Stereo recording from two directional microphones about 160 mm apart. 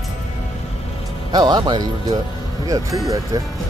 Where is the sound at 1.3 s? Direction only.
25° right (ahead or behind).